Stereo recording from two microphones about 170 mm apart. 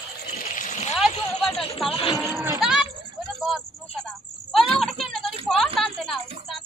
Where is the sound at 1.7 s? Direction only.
35° left (ahead or behind).